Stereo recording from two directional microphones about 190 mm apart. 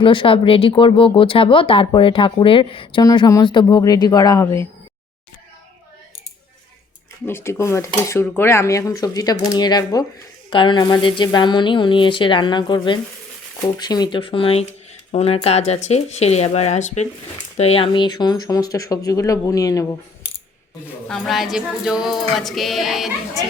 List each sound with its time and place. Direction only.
0.0 s speech: 25° left (ahead or behind)
7.3 s speech: 15° left (ahead or behind)
20.2 s coin: 60° left (ahead or behind)
21.1 s speech: centre (ahead or behind)